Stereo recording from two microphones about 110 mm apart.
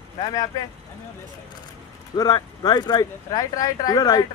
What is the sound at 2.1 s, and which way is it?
Speech, 35° left (ahead or behind).